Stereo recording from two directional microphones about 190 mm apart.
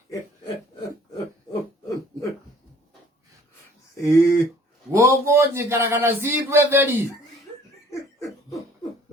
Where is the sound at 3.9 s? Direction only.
15° left (ahead or behind).